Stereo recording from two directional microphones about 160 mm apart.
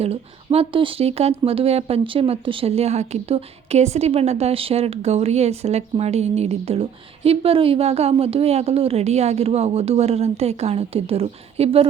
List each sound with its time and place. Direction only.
0.0 s speech: 40° right (ahead or behind)